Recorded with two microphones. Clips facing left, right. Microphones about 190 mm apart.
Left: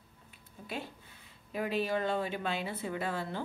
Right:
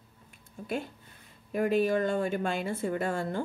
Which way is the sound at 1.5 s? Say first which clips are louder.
Right 6 dB; 50° right (ahead or behind).